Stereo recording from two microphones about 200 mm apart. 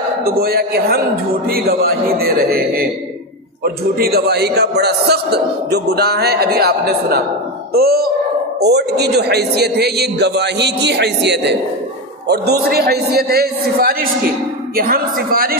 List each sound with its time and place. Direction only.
0.4 s a man's voice: 50° right (ahead or behind)